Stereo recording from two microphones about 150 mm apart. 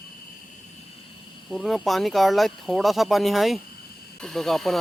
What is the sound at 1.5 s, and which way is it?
Speech, centre (ahead or behind).